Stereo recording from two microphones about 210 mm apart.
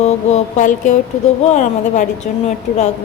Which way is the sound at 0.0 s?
35° left (ahead or behind).